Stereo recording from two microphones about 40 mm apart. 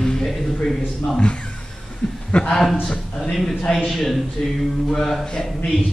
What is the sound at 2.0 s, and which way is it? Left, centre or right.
Chuckle, centre.